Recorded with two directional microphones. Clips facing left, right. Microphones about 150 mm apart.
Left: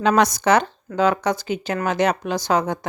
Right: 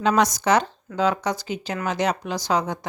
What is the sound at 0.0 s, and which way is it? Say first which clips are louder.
A woman's voice: left 3 dB; 60° left (ahead or behind).